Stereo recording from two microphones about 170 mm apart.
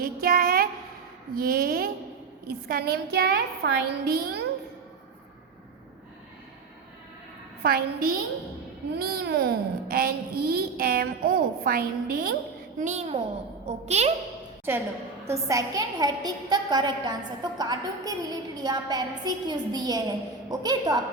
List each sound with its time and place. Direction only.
0.0 s a sound: 60° right (ahead or behind)
1.4 s a child's voice: 60° right (ahead or behind)
7.6 s a child's voice: 65° right (ahead or behind)
12.8 s a child's voice: 40° right (ahead or behind)
14.7 s a woman's voice: 15° right (ahead or behind)